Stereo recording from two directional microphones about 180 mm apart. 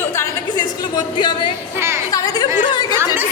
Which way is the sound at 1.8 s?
15° right (ahead or behind).